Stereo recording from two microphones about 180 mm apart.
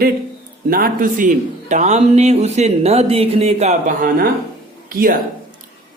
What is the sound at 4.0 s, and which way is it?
A man's voice, 50° right (ahead or behind).